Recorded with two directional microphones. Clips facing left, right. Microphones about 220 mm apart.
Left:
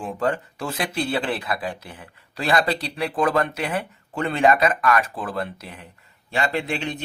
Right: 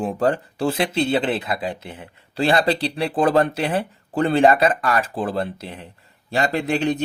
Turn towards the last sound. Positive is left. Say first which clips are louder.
# right 6 dB
turn(degrees=-40)  # may be behind; listen again after turning